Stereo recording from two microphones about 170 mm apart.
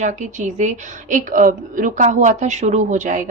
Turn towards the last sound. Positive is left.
turn(degrees=-50)  # may be behind; listen again after turning